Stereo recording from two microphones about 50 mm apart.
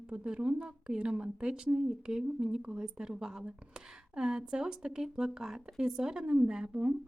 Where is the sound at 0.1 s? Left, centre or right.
Centre.